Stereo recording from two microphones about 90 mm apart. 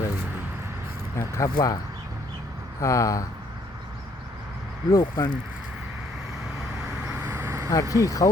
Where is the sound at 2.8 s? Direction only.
35° left (ahead or behind).